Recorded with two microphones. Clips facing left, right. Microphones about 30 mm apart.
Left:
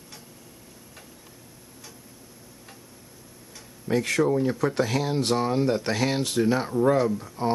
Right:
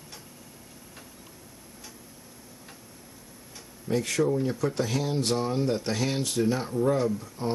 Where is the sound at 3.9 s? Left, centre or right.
Left.